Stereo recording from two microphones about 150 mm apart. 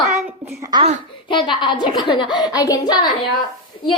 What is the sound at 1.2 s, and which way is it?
A woman's voice, 30° left (ahead or behind).